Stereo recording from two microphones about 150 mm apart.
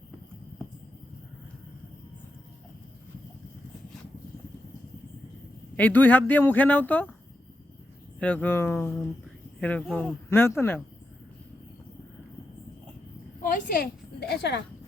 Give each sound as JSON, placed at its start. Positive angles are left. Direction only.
{"t": 5.7, "sound": "speech", "side_deg": 10}
{"t": 8.2, "sound": "speech", "side_deg": 10}
{"t": 13.4, "sound": "a sound", "side_deg": 70}